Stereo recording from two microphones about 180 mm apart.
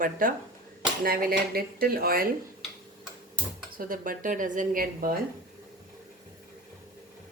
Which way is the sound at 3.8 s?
50° right (ahead or behind).